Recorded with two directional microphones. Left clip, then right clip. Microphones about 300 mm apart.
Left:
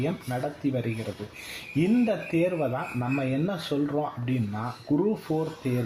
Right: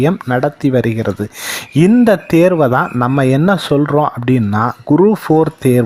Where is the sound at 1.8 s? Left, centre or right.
Right.